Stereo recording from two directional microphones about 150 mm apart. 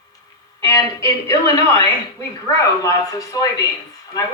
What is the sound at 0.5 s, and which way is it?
Speech, 20° left (ahead or behind).